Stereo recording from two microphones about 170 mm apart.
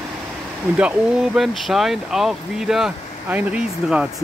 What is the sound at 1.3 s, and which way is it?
Speech, centre (ahead or behind).